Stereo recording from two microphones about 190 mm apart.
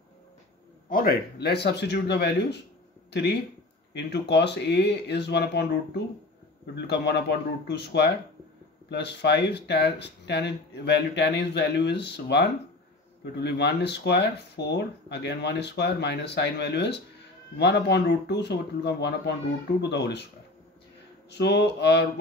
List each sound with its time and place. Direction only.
0.8 s speech: 50° left (ahead or behind)
6.7 s speech: 60° left (ahead or behind)
21.3 s speech: 60° left (ahead or behind)